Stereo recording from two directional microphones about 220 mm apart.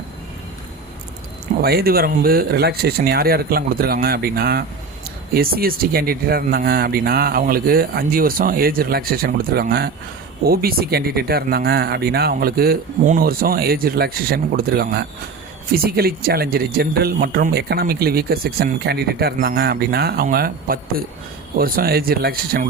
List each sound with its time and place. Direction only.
1.6 s speech: 45° right (ahead or behind)